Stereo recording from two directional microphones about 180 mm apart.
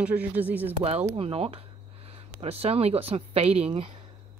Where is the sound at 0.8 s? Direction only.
35° right (ahead or behind).